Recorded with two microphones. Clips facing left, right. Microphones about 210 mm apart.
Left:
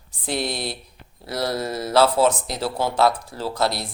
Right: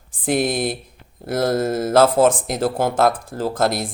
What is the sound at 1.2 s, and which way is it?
Speech, 50° right (ahead or behind).